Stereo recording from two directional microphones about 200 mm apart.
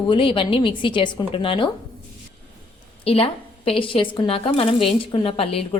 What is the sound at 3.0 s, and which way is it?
A woman's voice, 30° left (ahead or behind).